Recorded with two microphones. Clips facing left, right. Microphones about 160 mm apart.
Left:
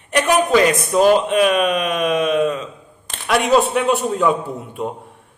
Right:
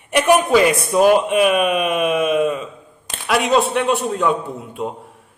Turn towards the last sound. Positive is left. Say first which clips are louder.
# left 1 dB
turn(degrees=0)  # may be behind; listen again after turning